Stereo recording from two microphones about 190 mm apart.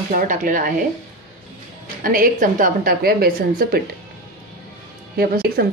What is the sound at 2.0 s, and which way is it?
A woman's voice, 50° right (ahead or behind).